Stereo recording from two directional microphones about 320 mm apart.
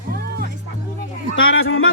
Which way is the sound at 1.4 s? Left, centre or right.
Left.